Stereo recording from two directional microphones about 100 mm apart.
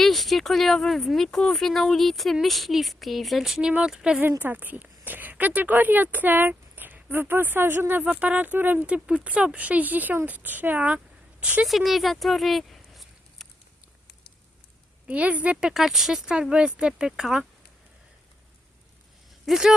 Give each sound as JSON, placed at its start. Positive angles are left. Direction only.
{"t": 0.0, "sound": "speech", "side_deg": 0}
{"t": 4.2, "sound": "speech", "side_deg": -20}
{"t": 11.7, "sound": "a sound", "side_deg": 0}
{"t": 15.0, "sound": "speech", "side_deg": -15}
{"t": 19.5, "sound": "speech", "side_deg": -5}